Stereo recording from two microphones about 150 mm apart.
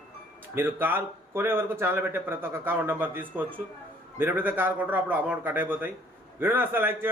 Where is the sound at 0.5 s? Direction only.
15° right (ahead or behind).